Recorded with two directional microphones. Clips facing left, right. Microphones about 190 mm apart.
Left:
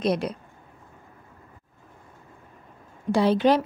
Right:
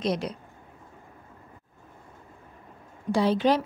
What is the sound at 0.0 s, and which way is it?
Speech, 60° left (ahead or behind).